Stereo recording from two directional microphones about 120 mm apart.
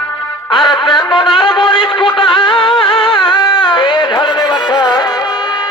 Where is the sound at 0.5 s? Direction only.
45° left (ahead or behind).